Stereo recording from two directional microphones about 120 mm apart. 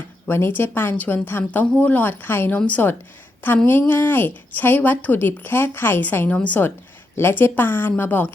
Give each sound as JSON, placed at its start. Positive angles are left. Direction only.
{"t": 0.3, "sound": "speech", "side_deg": 20}